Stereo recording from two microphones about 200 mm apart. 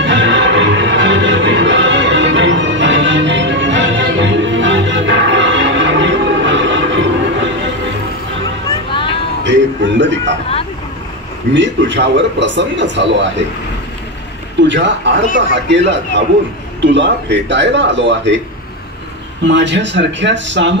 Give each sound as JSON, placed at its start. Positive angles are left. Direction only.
{"t": 0.0, "sound": "music", "side_deg": -60}
{"t": 9.4, "sound": "music", "side_deg": -65}
{"t": 11.5, "sound": "speech", "side_deg": -65}
{"t": 14.7, "sound": "speech", "side_deg": -65}
{"t": 19.4, "sound": "speech", "side_deg": -60}